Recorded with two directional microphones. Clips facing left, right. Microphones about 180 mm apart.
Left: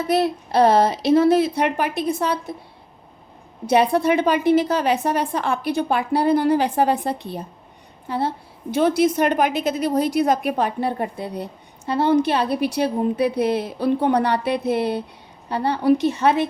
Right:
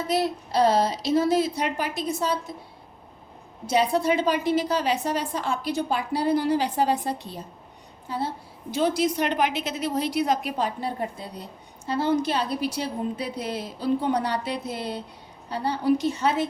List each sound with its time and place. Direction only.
0.1 s a woman's voice: 60° left (ahead or behind)
3.7 s a woman's voice: 60° left (ahead or behind)